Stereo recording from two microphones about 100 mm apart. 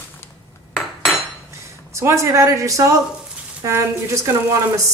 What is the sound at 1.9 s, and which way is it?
Speech, 30° right (ahead or behind).